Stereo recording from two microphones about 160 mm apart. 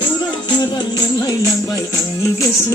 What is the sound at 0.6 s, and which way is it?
Music, 25° left (ahead or behind).